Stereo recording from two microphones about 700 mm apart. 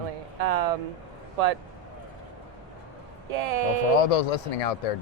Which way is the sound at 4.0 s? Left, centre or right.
Left.